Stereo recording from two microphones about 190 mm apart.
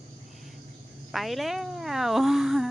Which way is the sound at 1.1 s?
Centre (ahead or behind).